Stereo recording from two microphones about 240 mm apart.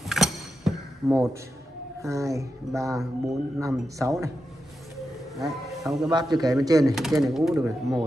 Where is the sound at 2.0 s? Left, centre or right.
Centre.